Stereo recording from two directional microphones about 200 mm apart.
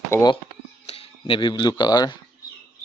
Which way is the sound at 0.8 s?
30° left (ahead or behind).